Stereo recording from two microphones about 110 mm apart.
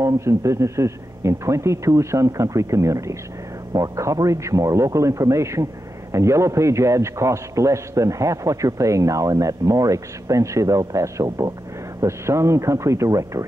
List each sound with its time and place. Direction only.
0.0 s a man's voice: 25° right (ahead or behind)